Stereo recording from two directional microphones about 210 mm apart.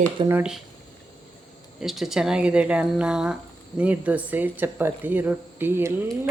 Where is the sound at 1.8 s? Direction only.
Centre (ahead or behind).